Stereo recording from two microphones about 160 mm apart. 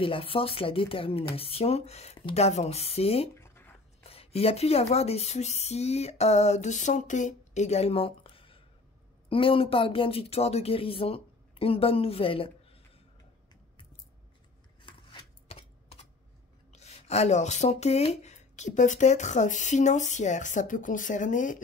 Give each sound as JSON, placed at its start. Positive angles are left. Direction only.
{"t": 0.0, "sound": "speech", "side_deg": 35}
{"t": 3.3, "sound": "writing", "side_deg": 15}
{"t": 4.0, "sound": "speech", "side_deg": 40}
{"t": 14.8, "sound": "a sound", "side_deg": 30}
{"t": 16.7, "sound": "speech", "side_deg": 45}